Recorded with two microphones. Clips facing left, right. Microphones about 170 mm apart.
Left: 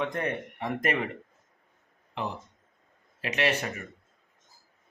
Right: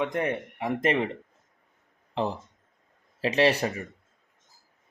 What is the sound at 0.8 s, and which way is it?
Speech, 25° right (ahead or behind).